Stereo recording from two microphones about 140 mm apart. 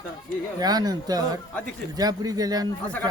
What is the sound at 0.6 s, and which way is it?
Speech, 30° right (ahead or behind).